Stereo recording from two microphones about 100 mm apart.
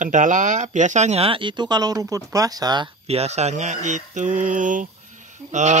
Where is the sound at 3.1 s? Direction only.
90° right.